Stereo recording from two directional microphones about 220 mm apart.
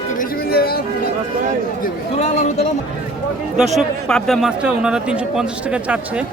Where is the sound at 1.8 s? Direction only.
30° left (ahead or behind).